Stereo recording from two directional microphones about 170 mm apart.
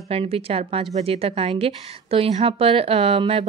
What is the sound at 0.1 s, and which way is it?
A woman's voice, 35° right (ahead or behind).